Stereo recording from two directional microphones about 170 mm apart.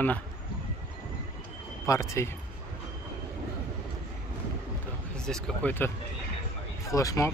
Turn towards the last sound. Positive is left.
turn(degrees=20)  # may be behind; listen again after turning